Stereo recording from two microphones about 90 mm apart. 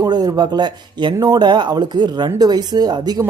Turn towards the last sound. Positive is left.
turn(degrees=-50)  # may be behind; listen again after turning